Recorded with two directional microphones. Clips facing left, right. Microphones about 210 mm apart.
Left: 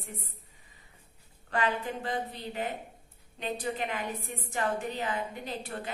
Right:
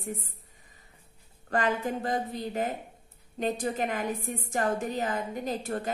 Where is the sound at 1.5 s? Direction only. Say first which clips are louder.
Right 3 dB; 45° right (ahead or behind).